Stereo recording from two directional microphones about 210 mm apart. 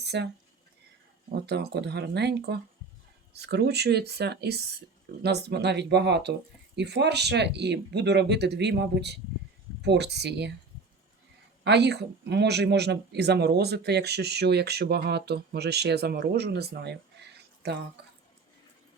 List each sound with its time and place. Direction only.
0.0 s a sound: 55° right (ahead or behind)
1.5 s speech: 50° right (ahead or behind)
11.6 s speech: 55° right (ahead or behind)